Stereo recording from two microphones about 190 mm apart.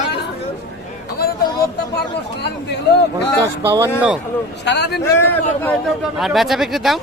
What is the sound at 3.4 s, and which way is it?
Speech, 15° right (ahead or behind).